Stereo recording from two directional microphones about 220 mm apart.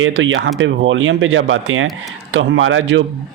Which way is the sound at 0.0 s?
65° right (ahead or behind).